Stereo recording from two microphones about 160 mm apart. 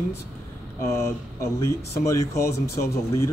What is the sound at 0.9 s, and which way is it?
Speech, 20° left (ahead or behind).